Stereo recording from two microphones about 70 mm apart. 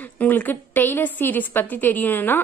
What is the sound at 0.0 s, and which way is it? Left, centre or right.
A woman's voice, left.